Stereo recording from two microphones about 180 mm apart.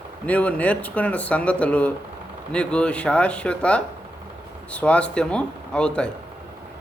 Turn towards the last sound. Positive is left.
turn(degrees=5)  # may be behind; listen again after turning